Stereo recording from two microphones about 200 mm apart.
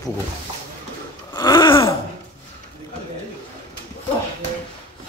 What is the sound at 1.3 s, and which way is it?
Gasp, 20° left (ahead or behind).